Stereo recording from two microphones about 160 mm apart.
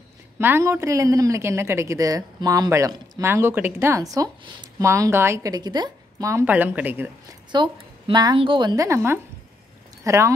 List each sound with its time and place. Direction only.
0.4 s a woman's voice: 15° right (ahead or behind)
7.5 s a woman's voice: 30° right (ahead or behind)